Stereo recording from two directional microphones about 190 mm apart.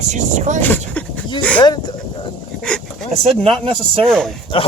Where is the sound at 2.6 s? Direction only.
5° left (ahead or behind).